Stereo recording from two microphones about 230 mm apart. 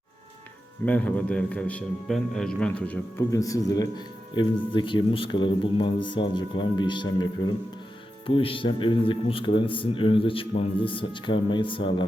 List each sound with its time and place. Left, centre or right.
0.9 s a man's voice: centre; by 12.0 s left